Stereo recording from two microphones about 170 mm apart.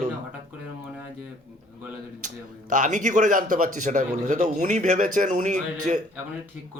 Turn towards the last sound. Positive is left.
turn(degrees=-45)  # may be behind; listen again after turning